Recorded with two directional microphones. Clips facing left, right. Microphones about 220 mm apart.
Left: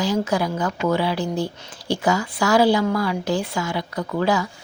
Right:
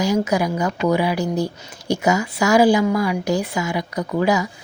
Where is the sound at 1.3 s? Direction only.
40° right (ahead or behind).